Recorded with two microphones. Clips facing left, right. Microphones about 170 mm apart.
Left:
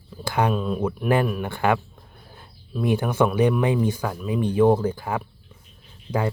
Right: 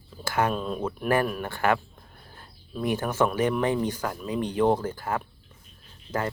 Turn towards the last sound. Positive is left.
turn(degrees=15)  # may be behind; listen again after turning